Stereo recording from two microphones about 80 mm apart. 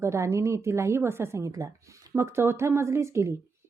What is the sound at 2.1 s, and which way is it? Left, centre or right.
A woman's voice, right.